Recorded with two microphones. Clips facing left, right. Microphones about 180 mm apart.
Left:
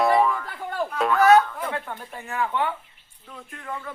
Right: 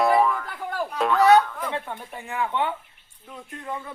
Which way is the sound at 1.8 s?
15° right (ahead or behind).